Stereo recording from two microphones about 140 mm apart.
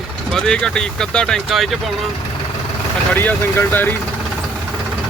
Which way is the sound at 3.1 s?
15° left (ahead or behind).